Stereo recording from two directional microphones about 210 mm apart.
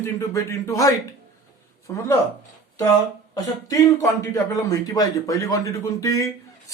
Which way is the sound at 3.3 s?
15° left (ahead or behind).